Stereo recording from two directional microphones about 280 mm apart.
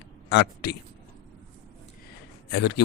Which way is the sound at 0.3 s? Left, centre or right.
Left.